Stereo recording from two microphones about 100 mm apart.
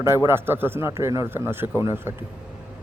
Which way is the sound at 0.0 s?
25° right (ahead or behind).